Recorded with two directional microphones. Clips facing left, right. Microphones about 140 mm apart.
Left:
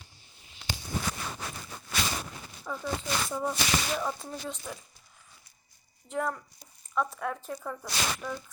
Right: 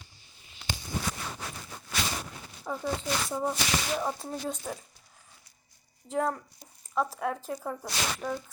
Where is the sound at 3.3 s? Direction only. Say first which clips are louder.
Even; 25° right (ahead or behind).